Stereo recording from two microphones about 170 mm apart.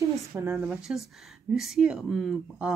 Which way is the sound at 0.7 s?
Centre (ahead or behind).